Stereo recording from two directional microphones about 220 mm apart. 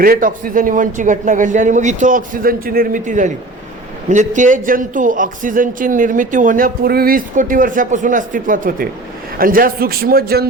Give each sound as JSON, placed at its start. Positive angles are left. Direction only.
{"t": 0.0, "sound": "a man's voice", "side_deg": -40}